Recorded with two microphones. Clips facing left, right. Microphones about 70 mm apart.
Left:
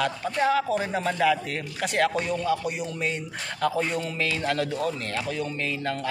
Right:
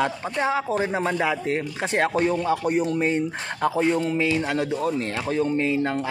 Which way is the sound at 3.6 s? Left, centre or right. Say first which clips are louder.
Right 5 dB; right.